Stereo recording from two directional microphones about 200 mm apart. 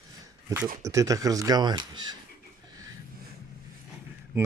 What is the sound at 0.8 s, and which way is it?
Speech, 15° right (ahead or behind).